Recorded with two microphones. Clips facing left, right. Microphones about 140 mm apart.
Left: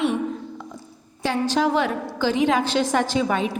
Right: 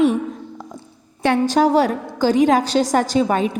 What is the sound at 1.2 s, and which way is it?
A woman's voice, 55° right (ahead or behind).